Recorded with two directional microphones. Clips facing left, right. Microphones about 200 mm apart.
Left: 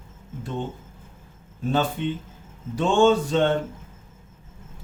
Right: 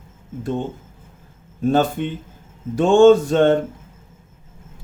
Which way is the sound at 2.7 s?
50° right (ahead or behind).